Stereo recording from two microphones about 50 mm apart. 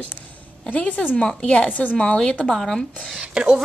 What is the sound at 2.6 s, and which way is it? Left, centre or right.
Speech, centre.